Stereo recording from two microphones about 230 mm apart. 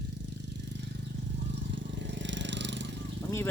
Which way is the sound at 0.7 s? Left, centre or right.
Right.